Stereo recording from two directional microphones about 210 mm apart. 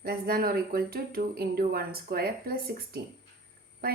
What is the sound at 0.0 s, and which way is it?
Speech, 45° right (ahead or behind).